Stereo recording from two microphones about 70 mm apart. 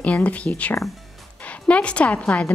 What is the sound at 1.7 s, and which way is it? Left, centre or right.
Speech, centre.